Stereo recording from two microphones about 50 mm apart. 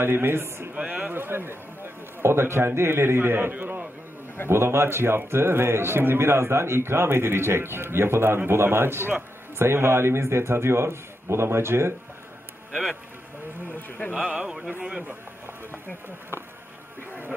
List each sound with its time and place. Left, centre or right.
0.0 s a man's voice: right
4.5 s a man's voice: right
13.7 s speech: left
14.4 s a man's voice: centre